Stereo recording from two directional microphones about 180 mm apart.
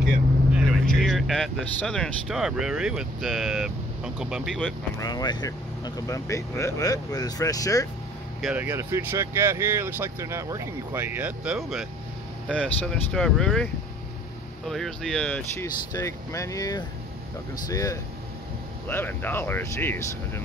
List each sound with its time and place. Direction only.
0.0 s speech: centre (ahead or behind)
4.6 s speech: 20° left (ahead or behind)
8.4 s speech: 5° right (ahead or behind)
14.7 s speech: centre (ahead or behind)